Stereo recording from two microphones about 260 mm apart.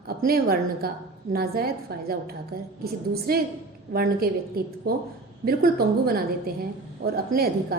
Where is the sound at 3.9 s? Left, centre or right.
Right.